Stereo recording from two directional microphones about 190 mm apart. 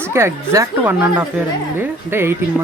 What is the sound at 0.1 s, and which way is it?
Speech, 15° right (ahead or behind).